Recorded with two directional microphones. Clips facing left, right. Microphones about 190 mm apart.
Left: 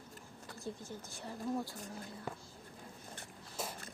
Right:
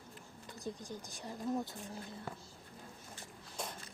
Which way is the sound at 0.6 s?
15° right (ahead or behind).